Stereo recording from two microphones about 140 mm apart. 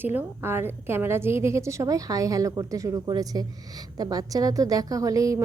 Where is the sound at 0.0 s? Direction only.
15° right (ahead or behind).